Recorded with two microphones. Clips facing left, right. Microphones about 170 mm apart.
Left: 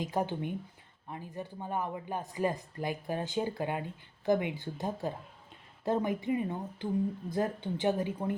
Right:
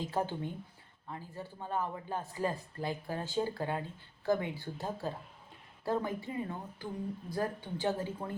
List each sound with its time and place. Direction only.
0.0 s a man's voice: 15° left (ahead or behind)